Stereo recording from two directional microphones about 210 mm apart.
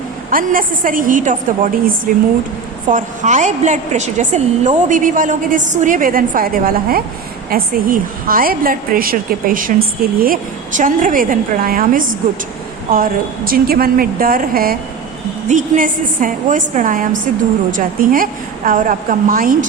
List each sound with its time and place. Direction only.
0.3 s a woman's voice: 40° right (ahead or behind)